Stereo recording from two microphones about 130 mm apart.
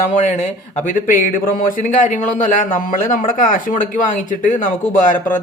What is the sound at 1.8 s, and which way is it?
A man's voice, 70° left (ahead or behind).